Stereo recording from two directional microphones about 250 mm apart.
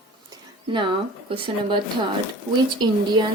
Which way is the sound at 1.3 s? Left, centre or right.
Centre.